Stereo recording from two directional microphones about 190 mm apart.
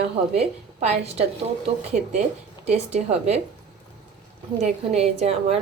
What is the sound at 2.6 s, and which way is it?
Speech, 35° right (ahead or behind).